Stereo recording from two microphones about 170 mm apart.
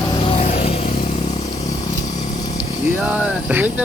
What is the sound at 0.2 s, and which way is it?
Vehicle, 35° left (ahead or behind).